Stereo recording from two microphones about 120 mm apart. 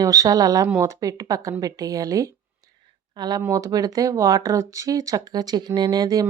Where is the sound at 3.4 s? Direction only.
25° right (ahead or behind).